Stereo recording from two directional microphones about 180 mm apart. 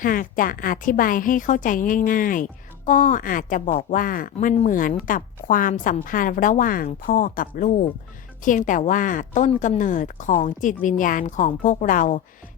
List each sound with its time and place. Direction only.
0.0 s a woman's voice: 50° left (ahead or behind)